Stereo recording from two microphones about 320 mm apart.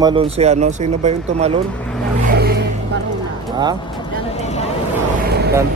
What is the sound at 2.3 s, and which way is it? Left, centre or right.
Vehicle, right.